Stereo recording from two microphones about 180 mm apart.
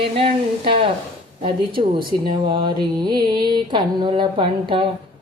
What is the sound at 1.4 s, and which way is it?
Speech, 30° right (ahead or behind).